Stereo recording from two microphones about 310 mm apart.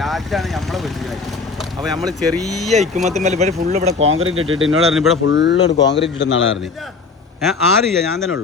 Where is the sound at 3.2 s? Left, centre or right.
Right.